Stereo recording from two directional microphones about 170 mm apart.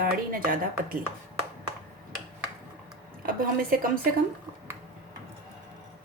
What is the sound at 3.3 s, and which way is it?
Speech, 55° right (ahead or behind).